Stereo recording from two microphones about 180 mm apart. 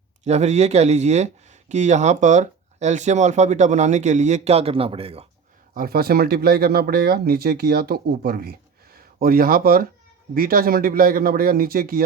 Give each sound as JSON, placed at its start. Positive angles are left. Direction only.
{"t": 0.3, "sound": "speech", "side_deg": -40}
{"t": 5.7, "sound": "a man's voice", "side_deg": -55}